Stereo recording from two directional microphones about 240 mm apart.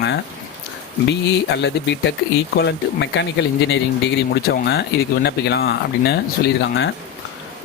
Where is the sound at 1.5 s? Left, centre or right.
Left.